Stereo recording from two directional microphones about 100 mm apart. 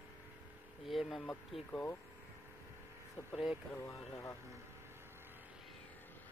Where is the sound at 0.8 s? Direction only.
Centre (ahead or behind).